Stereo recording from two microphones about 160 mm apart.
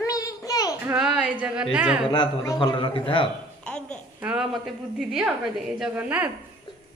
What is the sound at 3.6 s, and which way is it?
Babbling, 5° left (ahead or behind).